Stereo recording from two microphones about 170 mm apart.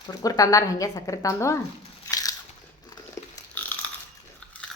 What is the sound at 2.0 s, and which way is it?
Biting, 20° left (ahead or behind).